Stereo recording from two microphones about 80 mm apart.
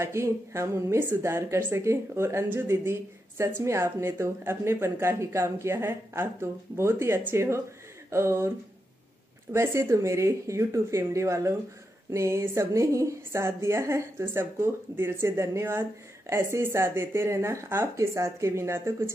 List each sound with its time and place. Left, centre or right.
0.0 s a woman's voice: right